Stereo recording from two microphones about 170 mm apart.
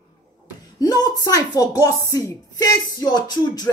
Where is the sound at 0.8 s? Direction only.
25° left (ahead or behind).